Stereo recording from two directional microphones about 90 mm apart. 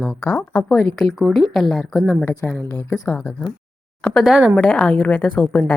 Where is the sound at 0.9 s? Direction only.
Centre (ahead or behind).